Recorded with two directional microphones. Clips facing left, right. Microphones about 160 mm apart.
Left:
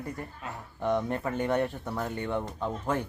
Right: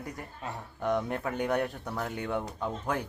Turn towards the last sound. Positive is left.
turn(degrees=0)  # may be behind; listen again after turning